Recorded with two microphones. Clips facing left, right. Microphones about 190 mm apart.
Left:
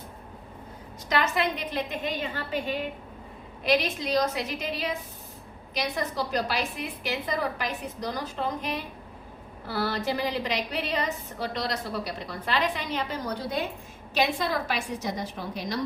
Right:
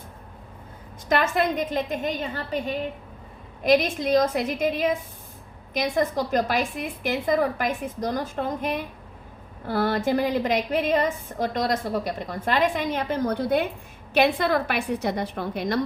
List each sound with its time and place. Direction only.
1.0 s a woman's voice: 50° right (ahead or behind)